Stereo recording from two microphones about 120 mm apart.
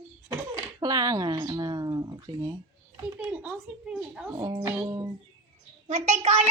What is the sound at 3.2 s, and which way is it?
A woman's voice, 15° right (ahead or behind).